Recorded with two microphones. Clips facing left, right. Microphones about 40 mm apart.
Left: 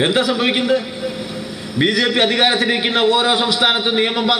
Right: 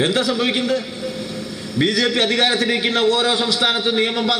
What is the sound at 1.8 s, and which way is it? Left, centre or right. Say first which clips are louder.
A man's voice: left 2 dB; centre.